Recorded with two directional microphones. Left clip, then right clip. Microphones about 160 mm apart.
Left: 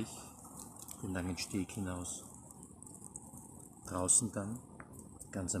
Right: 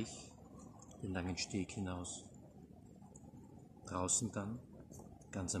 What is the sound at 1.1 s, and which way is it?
Speech, 10° left (ahead or behind).